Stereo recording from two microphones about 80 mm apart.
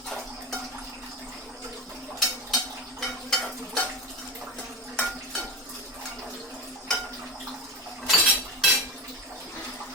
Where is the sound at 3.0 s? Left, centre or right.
Centre.